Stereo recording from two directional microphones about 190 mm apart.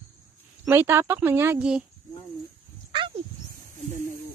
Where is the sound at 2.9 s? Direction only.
25° right (ahead or behind).